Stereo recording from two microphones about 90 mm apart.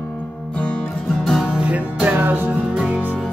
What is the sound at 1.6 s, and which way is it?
Music, 15° right (ahead or behind).